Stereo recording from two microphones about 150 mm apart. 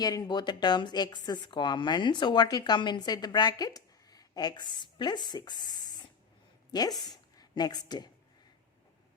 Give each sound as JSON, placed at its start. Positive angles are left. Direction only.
{"t": 0.0, "sound": "a woman's voice", "side_deg": 25}